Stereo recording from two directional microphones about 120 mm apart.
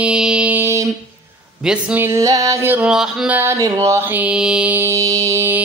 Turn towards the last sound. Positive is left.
turn(degrees=-20)  # may be behind; listen again after turning